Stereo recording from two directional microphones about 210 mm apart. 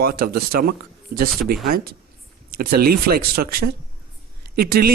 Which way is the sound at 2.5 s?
45° right (ahead or behind).